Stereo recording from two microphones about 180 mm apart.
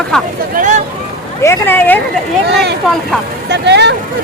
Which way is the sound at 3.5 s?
70° right (ahead or behind).